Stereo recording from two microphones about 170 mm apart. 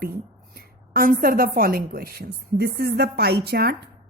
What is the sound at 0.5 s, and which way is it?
A woman's voice, 60° right (ahead or behind).